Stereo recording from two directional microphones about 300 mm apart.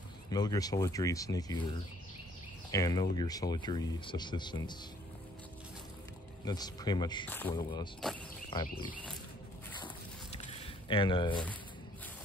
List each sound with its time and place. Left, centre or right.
0.3 s speech: centre
2.7 s speech: centre
6.4 s speech: centre
10.3 s a sound: centre